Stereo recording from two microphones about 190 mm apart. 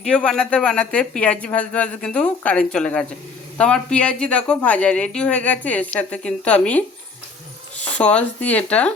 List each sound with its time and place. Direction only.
0.0 s speech: 5° left (ahead or behind)
7.9 s speech: 5° left (ahead or behind)